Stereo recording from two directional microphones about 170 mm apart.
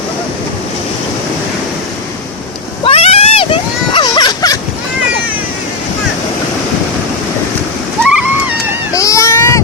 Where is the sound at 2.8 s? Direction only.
35° left (ahead or behind).